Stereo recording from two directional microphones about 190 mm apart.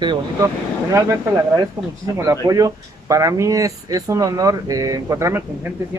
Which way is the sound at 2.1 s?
15° right (ahead or behind).